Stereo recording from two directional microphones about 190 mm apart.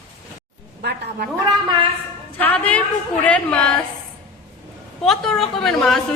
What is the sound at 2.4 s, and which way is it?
A woman's voice, 10° left (ahead or behind).